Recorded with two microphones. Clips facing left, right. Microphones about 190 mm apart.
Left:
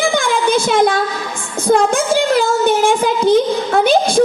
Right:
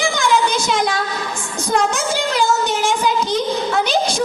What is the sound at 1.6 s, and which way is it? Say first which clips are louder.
Child singing: left 6 dB; 55° left (ahead or behind).